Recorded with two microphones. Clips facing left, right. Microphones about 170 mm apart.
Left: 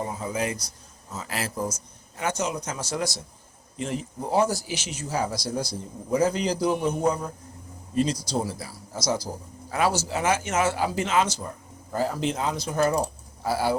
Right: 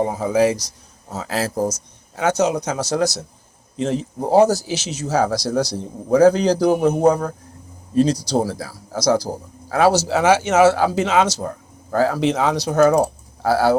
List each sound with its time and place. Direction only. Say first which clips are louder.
0.0 s speech: right 11 dB; 85° right
1.5 s a man's voice: right 8 dB; 40° right (ahead or behind)
1.7 s speech: right 6 dB; 80° right
4.4 s speech: right 9 dB; 85° right